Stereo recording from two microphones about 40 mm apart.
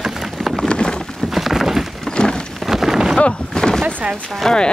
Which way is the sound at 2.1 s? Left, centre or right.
Left.